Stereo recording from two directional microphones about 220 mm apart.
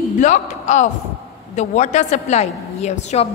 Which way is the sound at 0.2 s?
35° left (ahead or behind).